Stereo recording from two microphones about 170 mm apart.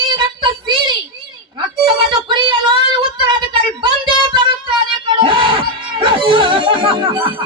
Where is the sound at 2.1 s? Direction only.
30° right (ahead or behind).